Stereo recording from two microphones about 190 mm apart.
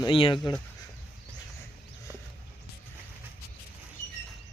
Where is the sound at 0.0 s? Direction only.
25° left (ahead or behind).